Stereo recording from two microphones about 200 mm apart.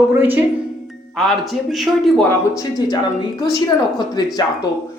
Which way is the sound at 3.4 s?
20° left (ahead or behind).